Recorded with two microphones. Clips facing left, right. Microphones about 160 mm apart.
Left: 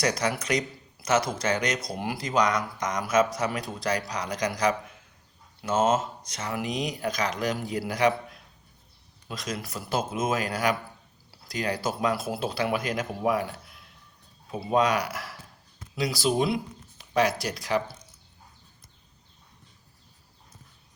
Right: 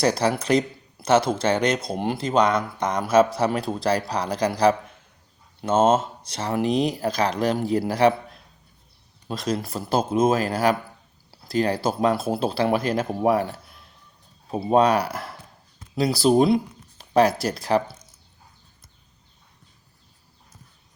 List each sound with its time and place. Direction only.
0.0 s speech: 30° right (ahead or behind)